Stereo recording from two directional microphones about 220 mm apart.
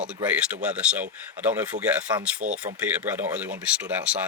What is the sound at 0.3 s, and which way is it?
Speech, 5° right (ahead or behind).